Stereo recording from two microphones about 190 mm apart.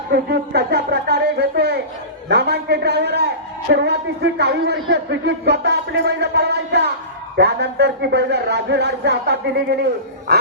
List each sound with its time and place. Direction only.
0.1 s a man's voice: 55° right (ahead or behind)